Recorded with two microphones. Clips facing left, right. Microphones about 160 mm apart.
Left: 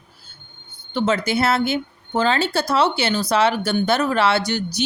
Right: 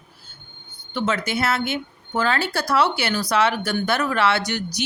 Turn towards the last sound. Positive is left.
turn(degrees=30)  # may be behind; listen again after turning